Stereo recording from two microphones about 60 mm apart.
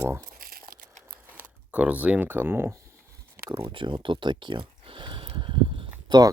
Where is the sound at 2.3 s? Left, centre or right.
Right.